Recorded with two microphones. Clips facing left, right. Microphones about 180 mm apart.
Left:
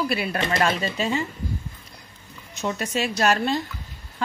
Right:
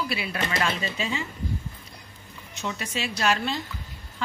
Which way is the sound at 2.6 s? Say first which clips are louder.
Left 6 dB; 45° left (ahead or behind).